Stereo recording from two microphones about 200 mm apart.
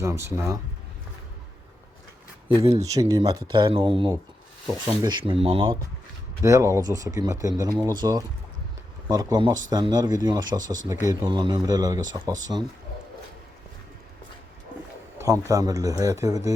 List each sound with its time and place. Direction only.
0.0 s speech: 15° right (ahead or behind)
2.5 s speech: 15° right (ahead or behind)
6.4 s speech: 15° right (ahead or behind)
15.2 s speech: 15° right (ahead or behind)